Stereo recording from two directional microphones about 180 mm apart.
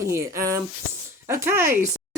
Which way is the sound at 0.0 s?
15° right (ahead or behind).